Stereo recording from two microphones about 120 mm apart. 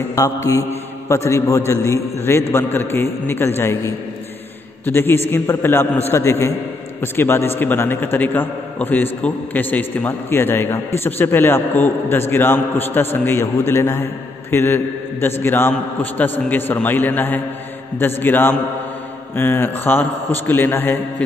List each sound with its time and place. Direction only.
0.1 s a man's voice: 25° left (ahead or behind)